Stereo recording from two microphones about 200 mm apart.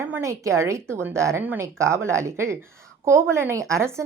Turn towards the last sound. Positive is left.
turn(degrees=-15)  # may be behind; listen again after turning